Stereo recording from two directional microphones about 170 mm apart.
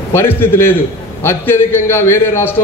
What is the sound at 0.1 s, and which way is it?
A man's voice, 15° left (ahead or behind).